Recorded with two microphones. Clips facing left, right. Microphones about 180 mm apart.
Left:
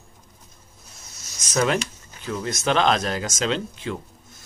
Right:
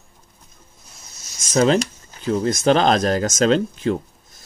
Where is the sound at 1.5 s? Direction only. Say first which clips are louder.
Right 6 dB; 30° right (ahead or behind).